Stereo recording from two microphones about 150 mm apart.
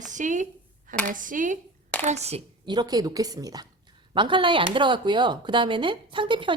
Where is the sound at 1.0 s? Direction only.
60° right (ahead or behind).